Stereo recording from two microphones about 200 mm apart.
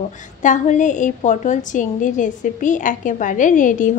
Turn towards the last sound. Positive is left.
turn(degrees=40)  # may be behind; listen again after turning